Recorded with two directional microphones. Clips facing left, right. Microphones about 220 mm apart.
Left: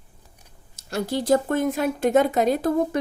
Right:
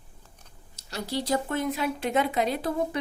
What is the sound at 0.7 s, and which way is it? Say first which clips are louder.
Speech: left 6 dB; 50° left (ahead or behind).